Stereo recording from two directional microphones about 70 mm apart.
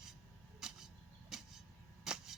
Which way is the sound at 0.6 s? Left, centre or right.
Centre.